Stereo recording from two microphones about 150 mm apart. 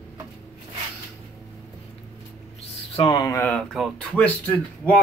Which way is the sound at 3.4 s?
5° left (ahead or behind).